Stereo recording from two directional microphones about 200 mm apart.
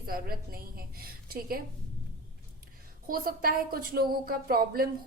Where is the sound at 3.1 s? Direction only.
45° right (ahead or behind).